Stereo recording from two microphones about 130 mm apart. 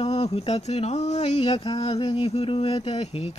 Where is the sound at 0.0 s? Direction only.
50° left (ahead or behind).